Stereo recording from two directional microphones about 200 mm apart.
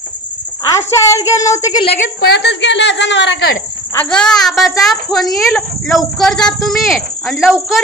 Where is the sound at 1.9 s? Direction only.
55° left (ahead or behind).